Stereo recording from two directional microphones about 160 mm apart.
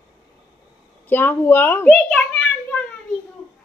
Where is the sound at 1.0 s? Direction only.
10° left (ahead or behind).